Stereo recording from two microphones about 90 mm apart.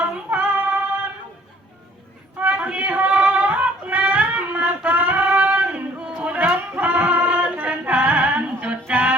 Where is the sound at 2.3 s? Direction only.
15° right (ahead or behind).